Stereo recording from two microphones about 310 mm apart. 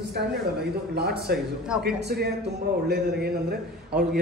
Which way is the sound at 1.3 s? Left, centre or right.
Right.